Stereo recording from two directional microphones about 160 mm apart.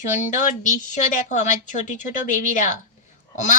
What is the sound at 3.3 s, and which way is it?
Speech, 50° left (ahead or behind).